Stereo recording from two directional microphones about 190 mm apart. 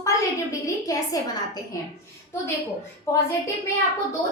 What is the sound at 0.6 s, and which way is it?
Speech, 20° left (ahead or behind).